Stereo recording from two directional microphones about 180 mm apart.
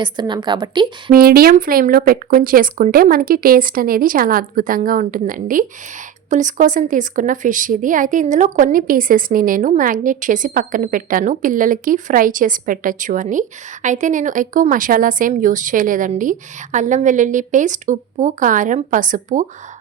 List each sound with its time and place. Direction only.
0.0 s a woman's voice: 25° right (ahead or behind)
1.1 s a woman's voice: 55° right (ahead or behind)